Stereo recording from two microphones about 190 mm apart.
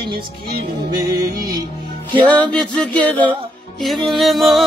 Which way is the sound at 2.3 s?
5° left (ahead or behind).